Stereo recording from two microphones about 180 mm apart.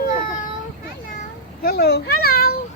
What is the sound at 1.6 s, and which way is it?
Speech, 60° left (ahead or behind).